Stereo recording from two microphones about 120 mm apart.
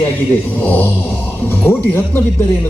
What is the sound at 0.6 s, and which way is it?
Speech, 15° left (ahead or behind).